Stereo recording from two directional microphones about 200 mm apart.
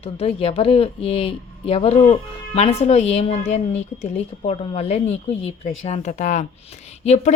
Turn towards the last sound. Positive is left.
turn(degrees=35)  # may be behind; listen again after turning